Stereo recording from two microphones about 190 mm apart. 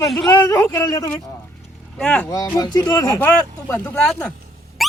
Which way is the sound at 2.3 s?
20° left (ahead or behind).